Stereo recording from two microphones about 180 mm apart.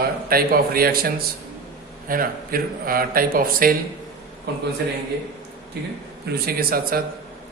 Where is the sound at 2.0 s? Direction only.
50° right (ahead or behind).